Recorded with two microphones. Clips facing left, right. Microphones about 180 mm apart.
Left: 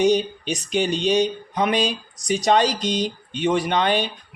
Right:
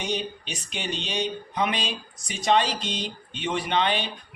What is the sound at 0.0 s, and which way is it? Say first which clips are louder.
Speech: left 11 dB; 40° left (ahead or behind).